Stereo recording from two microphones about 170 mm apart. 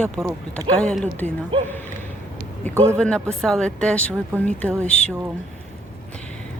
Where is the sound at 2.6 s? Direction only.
10° left (ahead or behind).